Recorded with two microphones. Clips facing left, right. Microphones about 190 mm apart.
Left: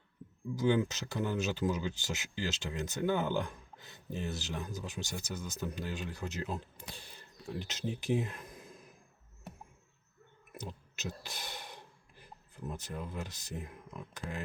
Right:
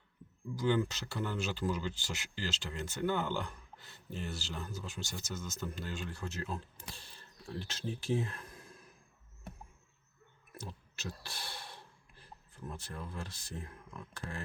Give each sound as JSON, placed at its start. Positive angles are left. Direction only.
{"t": 0.5, "sound": "speech", "side_deg": 20}
{"t": 10.6, "sound": "speech", "side_deg": 20}